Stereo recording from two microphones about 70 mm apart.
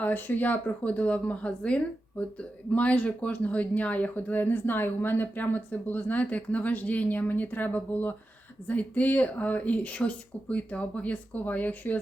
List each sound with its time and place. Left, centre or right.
0.0 s speech: left